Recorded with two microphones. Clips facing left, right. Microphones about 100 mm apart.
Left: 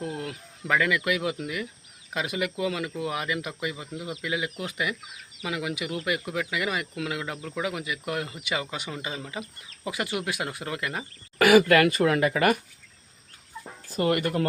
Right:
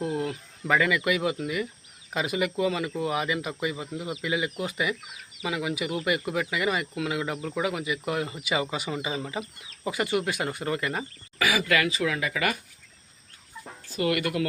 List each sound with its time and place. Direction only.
0.0 s speech: centre (ahead or behind)
11.3 s speech: 55° left (ahead or behind)
13.9 s speech: 45° left (ahead or behind)